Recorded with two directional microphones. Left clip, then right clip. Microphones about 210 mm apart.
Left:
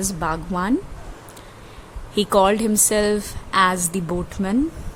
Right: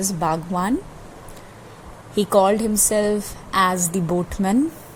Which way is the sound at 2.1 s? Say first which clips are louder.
Even; 10° left (ahead or behind).